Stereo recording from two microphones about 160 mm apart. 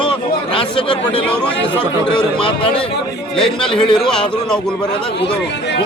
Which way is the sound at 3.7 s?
30° left (ahead or behind).